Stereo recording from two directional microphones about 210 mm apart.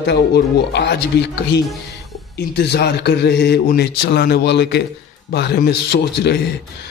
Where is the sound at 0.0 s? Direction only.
55° left (ahead or behind).